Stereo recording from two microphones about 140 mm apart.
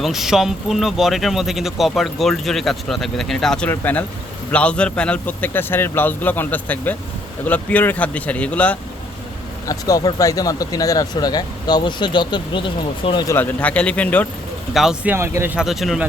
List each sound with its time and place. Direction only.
0.0 s a man's voice: centre (ahead or behind)
9.6 s speech: 25° left (ahead or behind)
13.2 s a man's voice: 15° left (ahead or behind)
14.7 s speech: 5° right (ahead or behind)
15.1 s speech: 15° right (ahead or behind)
15.5 s speech: centre (ahead or behind)